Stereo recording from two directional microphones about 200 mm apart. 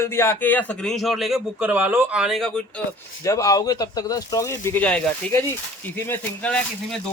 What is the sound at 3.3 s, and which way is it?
A man's voice, 15° left (ahead or behind).